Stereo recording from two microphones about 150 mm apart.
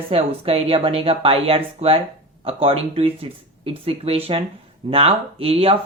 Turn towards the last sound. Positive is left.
turn(degrees=-40)  # may be behind; listen again after turning